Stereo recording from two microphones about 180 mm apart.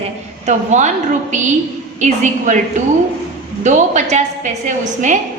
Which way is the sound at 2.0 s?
45° right (ahead or behind).